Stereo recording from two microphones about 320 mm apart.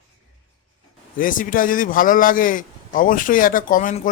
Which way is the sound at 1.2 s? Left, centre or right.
Left.